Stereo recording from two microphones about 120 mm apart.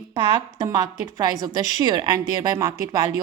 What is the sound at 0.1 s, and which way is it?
A woman's voice, 40° right (ahead or behind).